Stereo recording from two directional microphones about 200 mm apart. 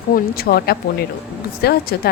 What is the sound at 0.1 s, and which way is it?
A woman's voice, 50° left (ahead or behind).